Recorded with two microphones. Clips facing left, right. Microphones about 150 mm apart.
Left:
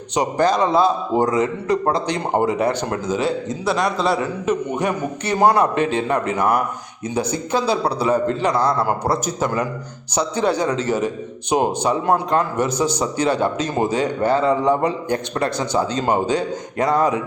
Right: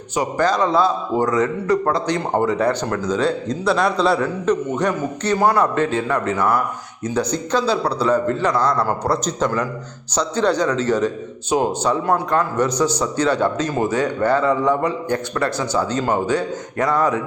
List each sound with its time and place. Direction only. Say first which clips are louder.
0.1 s a man's voice: left 1 dB; 20° left (ahead or behind)
14.3 s a man's voice: left 1 dB; 25° left (ahead or behind)